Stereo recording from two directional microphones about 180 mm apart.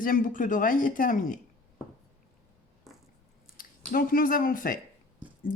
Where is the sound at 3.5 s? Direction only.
50° left (ahead or behind).